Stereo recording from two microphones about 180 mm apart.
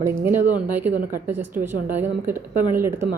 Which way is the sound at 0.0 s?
10° right (ahead or behind).